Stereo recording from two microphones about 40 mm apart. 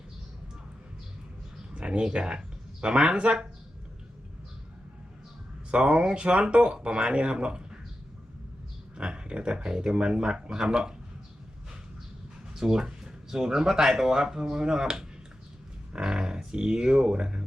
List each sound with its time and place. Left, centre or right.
1.7 s speech: right
5.7 s speech: right
9.0 s a sound: right
9.6 s speech: right
12.5 s speech: centre